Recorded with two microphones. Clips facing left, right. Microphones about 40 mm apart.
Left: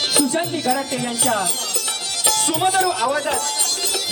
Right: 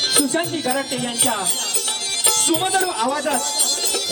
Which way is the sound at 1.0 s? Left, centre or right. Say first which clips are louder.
Left 1 dB; right.